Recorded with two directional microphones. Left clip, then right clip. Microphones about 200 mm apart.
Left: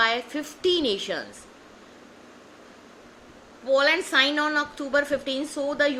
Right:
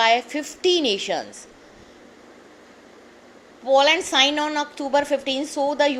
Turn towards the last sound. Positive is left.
turn(degrees=-20)  # may be behind; listen again after turning